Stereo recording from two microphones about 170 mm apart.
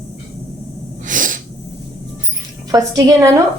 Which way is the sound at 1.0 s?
50° right (ahead or behind).